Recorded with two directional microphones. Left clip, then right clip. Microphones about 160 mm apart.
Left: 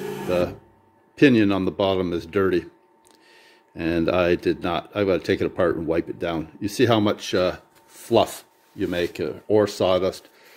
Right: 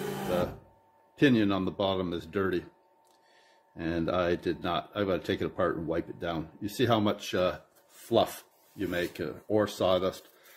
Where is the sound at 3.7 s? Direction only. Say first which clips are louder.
Left 8 dB; 40° left (ahead or behind).